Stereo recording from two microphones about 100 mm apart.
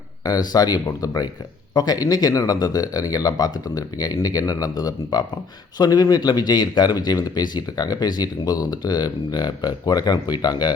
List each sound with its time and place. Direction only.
0.3 s a man's voice: 40° left (ahead or behind)